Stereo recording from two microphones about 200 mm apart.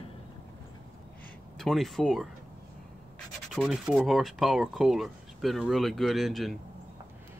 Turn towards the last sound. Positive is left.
turn(degrees=0)  # may be behind; listen again after turning